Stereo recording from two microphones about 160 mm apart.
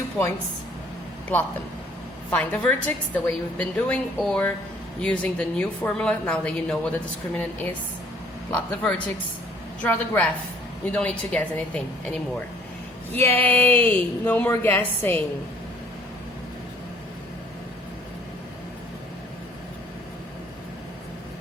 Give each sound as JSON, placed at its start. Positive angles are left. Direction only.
{"t": 0.2, "sound": "a woman's voice", "side_deg": 5}